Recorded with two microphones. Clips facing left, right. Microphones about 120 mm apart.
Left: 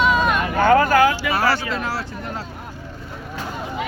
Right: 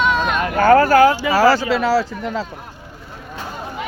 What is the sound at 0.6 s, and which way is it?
Speech, 40° right (ahead or behind).